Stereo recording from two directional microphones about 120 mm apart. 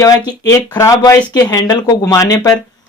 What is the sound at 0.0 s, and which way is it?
Speech, 30° left (ahead or behind).